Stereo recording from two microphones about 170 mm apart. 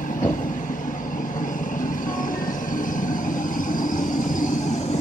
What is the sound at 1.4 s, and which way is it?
Vehicle, 50° left (ahead or behind).